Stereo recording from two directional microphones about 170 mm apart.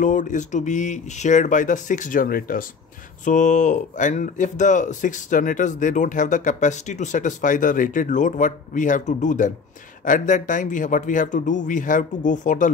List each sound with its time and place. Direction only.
0.0 s speech: 45° left (ahead or behind)
3.3 s speech: 45° left (ahead or behind)